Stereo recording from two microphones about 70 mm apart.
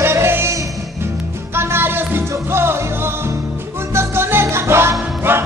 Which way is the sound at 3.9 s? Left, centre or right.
Right.